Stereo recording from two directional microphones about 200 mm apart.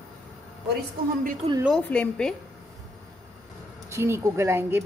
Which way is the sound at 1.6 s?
5° left (ahead or behind).